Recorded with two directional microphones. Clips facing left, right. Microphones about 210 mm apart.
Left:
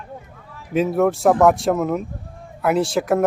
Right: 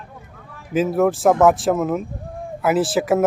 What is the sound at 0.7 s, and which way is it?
Speech, centre (ahead or behind).